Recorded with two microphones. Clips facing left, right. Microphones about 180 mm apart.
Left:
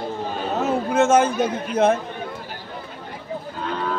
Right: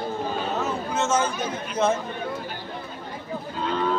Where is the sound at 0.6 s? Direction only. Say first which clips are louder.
Left 7 dB; 55° left (ahead or behind).